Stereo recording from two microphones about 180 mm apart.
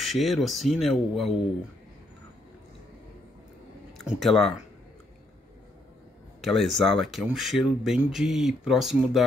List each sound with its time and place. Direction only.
0.0 s speech: centre (ahead or behind)
4.0 s speech: centre (ahead or behind)
6.4 s speech: centre (ahead or behind)